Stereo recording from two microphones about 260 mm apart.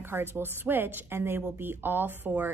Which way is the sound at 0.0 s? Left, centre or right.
Centre.